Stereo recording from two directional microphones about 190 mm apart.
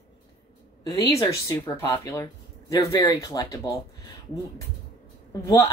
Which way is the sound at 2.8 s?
15° left (ahead or behind).